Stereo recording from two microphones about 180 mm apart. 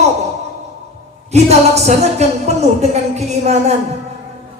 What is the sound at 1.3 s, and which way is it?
A woman's voice, 35° right (ahead or behind).